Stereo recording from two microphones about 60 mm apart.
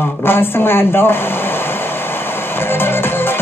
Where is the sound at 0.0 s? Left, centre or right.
Left.